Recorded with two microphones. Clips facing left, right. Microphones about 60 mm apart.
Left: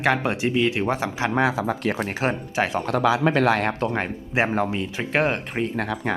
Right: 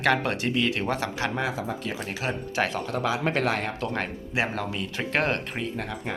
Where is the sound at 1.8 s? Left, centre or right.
Left.